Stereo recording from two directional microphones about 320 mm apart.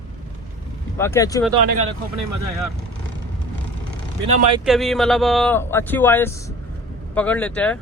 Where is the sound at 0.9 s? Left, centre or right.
Centre.